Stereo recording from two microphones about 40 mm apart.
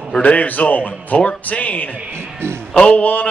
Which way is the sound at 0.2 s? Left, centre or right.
Left.